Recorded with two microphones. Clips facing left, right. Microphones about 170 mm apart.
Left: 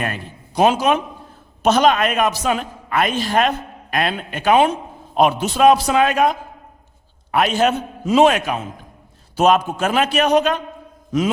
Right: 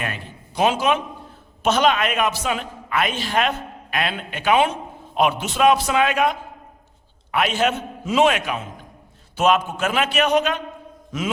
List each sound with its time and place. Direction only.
0.0 s a man's voice: 45° left (ahead or behind)